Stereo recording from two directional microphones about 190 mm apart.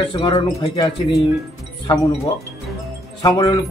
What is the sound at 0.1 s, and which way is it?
Speech, 25° left (ahead or behind).